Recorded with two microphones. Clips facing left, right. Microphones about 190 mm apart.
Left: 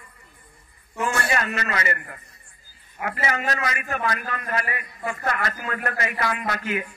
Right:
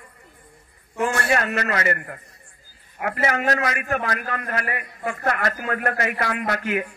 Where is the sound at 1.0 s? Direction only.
55° right (ahead or behind).